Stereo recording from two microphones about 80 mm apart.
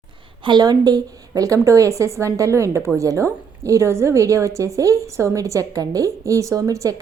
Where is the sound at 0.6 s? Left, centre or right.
Right.